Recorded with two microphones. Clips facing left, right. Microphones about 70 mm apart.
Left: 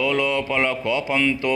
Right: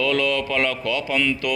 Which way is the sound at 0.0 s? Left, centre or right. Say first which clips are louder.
Even; centre.